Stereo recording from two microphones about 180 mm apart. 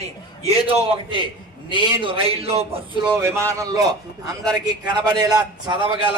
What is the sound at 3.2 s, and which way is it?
A man's voice, 15° right (ahead or behind).